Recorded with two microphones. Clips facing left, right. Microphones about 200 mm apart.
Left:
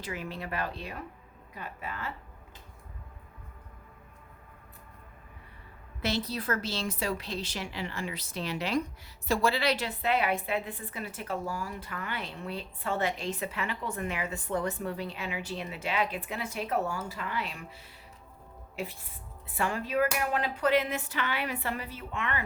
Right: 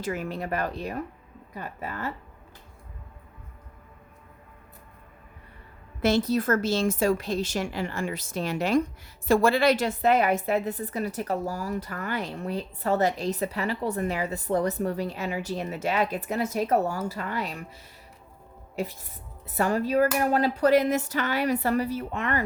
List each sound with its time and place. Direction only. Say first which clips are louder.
0.0 s speech: right 7 dB; 45° right (ahead or behind)
6.0 s a woman's voice: right 9 dB; 50° right (ahead or behind)
19.5 s a woman's voice: right 7 dB; 40° right (ahead or behind)